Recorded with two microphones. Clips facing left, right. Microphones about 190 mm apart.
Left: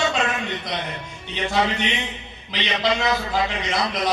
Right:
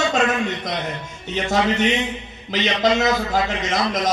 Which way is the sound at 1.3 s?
45° right (ahead or behind).